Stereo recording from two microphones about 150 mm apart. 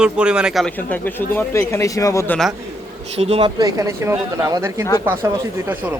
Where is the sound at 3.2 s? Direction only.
40° right (ahead or behind).